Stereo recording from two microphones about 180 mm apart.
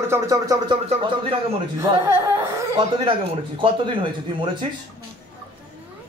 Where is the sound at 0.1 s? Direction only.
20° right (ahead or behind).